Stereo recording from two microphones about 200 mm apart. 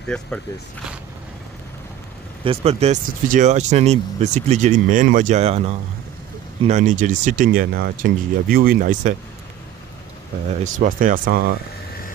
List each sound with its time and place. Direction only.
0.1 s speech: 5° left (ahead or behind)
2.4 s speech: 30° right (ahead or behind)
10.6 s speech: 40° right (ahead or behind)